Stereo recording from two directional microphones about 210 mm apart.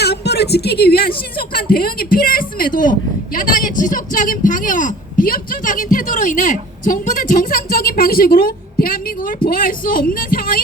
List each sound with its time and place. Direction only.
0.0 s speech: 50° left (ahead or behind)